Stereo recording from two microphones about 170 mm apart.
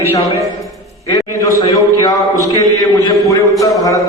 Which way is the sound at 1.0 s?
20° left (ahead or behind).